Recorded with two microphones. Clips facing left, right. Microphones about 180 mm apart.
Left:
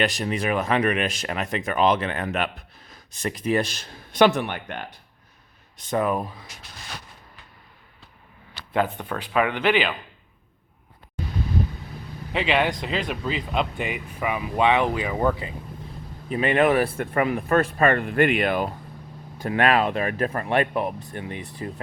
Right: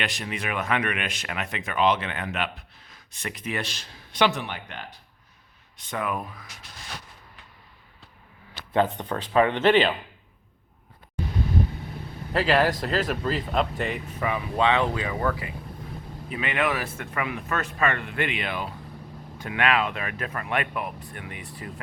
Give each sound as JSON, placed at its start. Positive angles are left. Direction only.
{"t": 0.0, "sound": "speech", "side_deg": 40}
{"t": 5.7, "sound": "speech", "side_deg": 40}
{"t": 8.7, "sound": "speech", "side_deg": -20}
{"t": 12.3, "sound": "speech", "side_deg": 0}
{"t": 16.3, "sound": "speech", "side_deg": 40}
{"t": 16.8, "sound": "speech", "side_deg": 35}